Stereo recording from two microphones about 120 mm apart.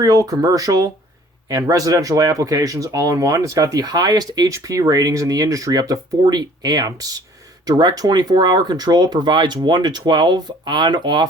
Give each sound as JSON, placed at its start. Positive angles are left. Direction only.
{"t": 0.0, "sound": "speech", "side_deg": -30}